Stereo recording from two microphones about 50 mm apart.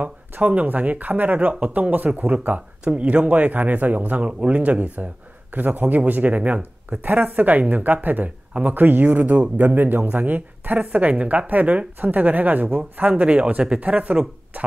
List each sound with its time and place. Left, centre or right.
0.4 s speech: right
13.1 s speech: right